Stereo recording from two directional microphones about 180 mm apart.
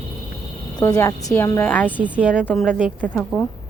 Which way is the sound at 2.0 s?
10° right (ahead or behind).